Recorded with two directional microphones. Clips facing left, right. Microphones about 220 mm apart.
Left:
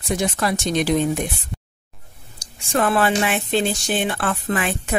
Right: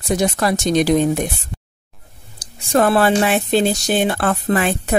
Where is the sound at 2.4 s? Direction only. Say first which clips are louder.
Right 5 dB; 40° right (ahead or behind).